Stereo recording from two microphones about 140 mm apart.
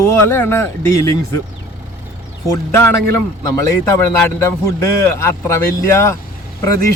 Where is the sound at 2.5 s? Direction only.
20° left (ahead or behind).